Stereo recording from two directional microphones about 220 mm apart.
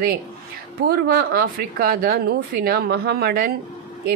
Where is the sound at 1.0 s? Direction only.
45° right (ahead or behind).